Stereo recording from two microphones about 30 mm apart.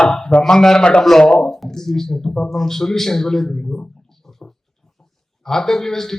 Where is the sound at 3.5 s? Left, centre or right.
Left.